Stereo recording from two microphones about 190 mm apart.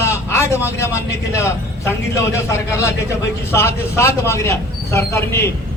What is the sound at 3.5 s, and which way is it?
Speech, 15° left (ahead or behind).